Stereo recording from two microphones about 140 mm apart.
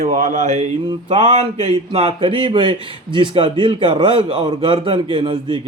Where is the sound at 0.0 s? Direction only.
60° right (ahead or behind).